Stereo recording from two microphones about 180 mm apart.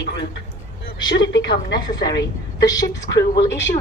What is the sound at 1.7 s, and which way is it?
A woman's voice, 20° left (ahead or behind).